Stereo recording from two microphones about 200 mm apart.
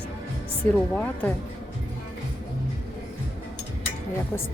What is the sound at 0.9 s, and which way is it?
Speech, 5° left (ahead or behind).